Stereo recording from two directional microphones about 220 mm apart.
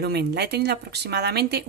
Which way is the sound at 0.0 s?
45° right (ahead or behind).